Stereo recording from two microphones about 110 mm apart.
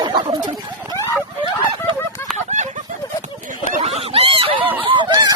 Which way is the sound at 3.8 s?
65° right (ahead or behind).